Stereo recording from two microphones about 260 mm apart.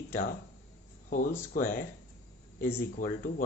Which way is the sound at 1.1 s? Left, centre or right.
Left.